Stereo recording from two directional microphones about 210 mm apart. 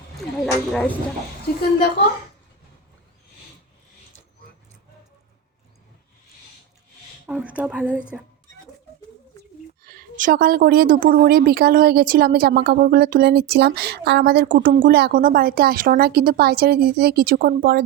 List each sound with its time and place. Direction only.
0.7 s speech: 5° left (ahead or behind)
1.5 s a woman's voice: 45° left (ahead or behind)
7.3 s a woman's voice: 5° right (ahead or behind)
9.8 s a woman's voice: 45° right (ahead or behind)